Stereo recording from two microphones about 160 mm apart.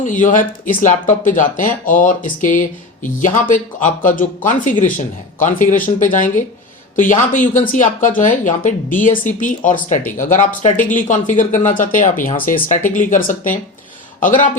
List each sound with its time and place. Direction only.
0.0 s speech: 55° left (ahead or behind)